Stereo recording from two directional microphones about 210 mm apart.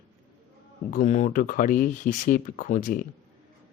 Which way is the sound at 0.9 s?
35° left (ahead or behind).